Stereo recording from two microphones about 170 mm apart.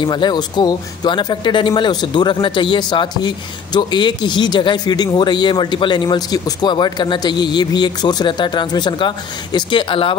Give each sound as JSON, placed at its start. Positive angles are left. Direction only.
{"t": 0.0, "sound": "a man's voice", "side_deg": 25}